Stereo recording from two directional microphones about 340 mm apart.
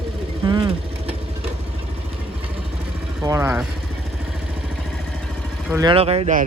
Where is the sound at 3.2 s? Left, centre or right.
Centre.